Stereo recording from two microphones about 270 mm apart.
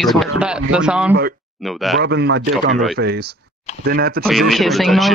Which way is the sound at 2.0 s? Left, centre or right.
Right.